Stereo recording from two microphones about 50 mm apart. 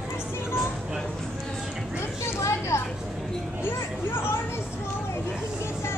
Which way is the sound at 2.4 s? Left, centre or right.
Left.